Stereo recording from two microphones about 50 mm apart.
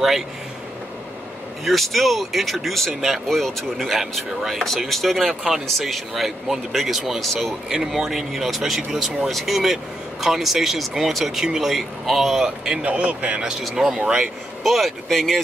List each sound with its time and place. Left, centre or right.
1.6 s speech: centre
12.6 s speech: right
14.6 s speech: centre